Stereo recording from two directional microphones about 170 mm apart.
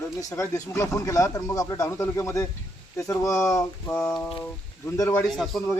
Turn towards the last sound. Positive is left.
turn(degrees=0)  # may be behind; listen again after turning